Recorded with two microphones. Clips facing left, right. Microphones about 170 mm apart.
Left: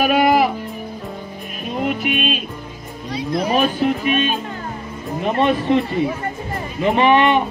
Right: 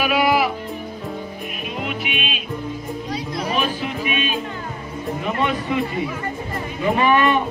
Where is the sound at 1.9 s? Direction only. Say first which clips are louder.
Left 6 dB; 45° left (ahead or behind).